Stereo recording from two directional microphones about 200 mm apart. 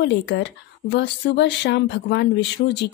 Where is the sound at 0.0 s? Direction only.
60° left (ahead or behind).